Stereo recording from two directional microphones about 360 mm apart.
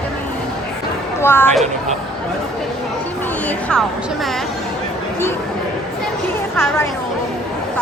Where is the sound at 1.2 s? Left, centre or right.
Centre.